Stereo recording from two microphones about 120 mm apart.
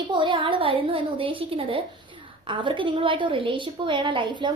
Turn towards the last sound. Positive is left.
turn(degrees=-40)  # may be behind; listen again after turning